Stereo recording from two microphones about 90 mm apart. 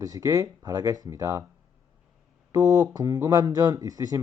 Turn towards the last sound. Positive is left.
turn(degrees=-45)  # may be behind; listen again after turning